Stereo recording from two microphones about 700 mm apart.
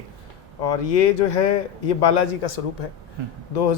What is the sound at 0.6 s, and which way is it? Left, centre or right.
Speech, left.